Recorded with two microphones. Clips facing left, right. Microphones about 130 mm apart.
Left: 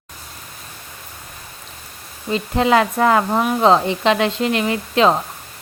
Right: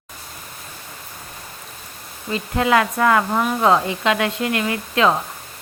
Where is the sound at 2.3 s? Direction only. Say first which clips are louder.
Left 2 dB; 25° left (ahead or behind).